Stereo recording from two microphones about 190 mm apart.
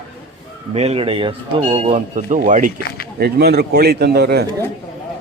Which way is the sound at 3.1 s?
55° right (ahead or behind).